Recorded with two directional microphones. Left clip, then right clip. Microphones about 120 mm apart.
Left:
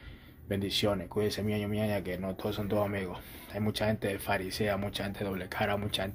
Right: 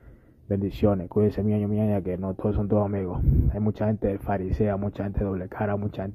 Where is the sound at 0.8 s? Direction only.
45° right (ahead or behind).